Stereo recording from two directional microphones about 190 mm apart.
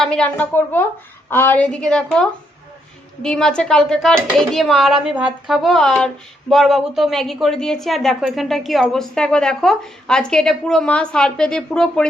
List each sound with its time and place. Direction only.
0.0 s a woman's voice: 5° left (ahead or behind)